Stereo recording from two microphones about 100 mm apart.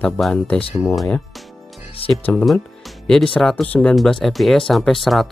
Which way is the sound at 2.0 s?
65° left (ahead or behind).